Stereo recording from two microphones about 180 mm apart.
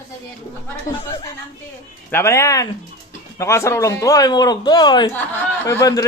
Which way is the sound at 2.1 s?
15° left (ahead or behind).